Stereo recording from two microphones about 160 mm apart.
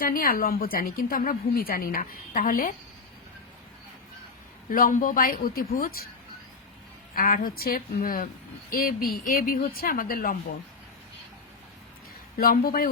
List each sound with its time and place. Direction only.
0.0 s a woman's voice: 65° left (ahead or behind)
4.7 s a woman's voice: 60° left (ahead or behind)
7.2 s a woman's voice: 65° left (ahead or behind)
12.4 s a woman's voice: 65° left (ahead or behind)